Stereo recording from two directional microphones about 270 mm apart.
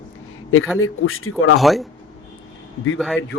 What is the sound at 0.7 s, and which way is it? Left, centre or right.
Speech, left.